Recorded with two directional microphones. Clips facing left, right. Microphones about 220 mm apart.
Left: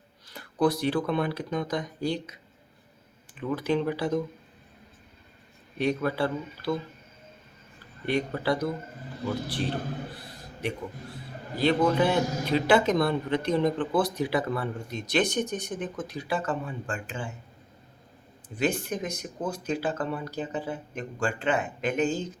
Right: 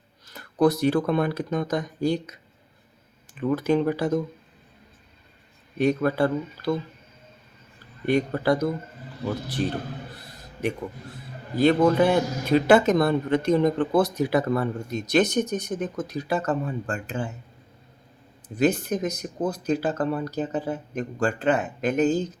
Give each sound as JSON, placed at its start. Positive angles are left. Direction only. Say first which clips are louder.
{"t": 0.3, "sound": "a man's voice", "louder": "right 4 dB", "side_deg": -45}
{"t": 3.4, "sound": "a man's voice", "louder": "right 5 dB", "side_deg": -45}
{"t": 5.7, "sound": "a man's voice", "louder": "right 5 dB", "side_deg": -45}
{"t": 8.0, "sound": "a man's voice", "louder": "right 5 dB", "side_deg": -45}
{"t": 10.6, "sound": "a man's voice", "louder": "right 4 dB", "side_deg": -45}
{"t": 18.4, "sound": "speech", "louder": "right 5 dB", "side_deg": -40}